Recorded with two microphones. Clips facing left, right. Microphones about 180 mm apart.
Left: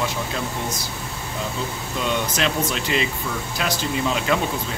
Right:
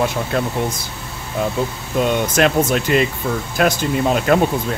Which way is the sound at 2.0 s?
50° right (ahead or behind).